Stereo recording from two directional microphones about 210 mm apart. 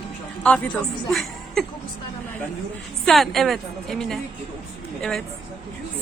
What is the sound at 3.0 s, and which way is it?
A woman's voice, centre (ahead or behind).